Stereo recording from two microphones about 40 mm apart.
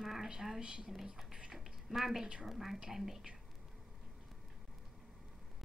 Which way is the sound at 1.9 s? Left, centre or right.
Centre.